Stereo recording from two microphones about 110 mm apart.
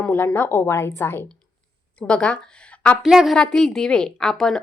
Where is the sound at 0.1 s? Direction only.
20° left (ahead or behind).